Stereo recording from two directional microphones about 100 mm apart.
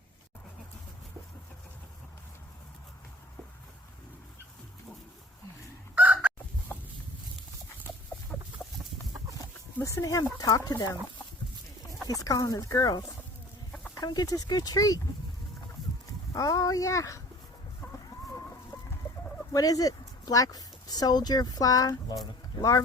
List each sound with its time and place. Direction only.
5.9 s chicken: 15° right (ahead or behind)
6.7 s a sound: 15° left (ahead or behind)
8.3 s chicken: 20° left (ahead or behind)
9.8 s speech: 35° left (ahead or behind)
12.0 s speech: 35° left (ahead or behind)
16.3 s speech: 35° left (ahead or behind)
19.5 s speech: 35° left (ahead or behind)